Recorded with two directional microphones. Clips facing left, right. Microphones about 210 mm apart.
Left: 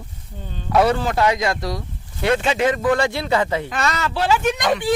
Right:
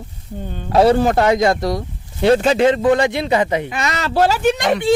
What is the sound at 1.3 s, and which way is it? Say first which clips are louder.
Speech: right 7 dB; 25° right (ahead or behind).